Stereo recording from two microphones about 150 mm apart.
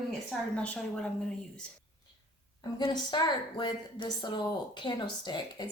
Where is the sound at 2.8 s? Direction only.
30° left (ahead or behind).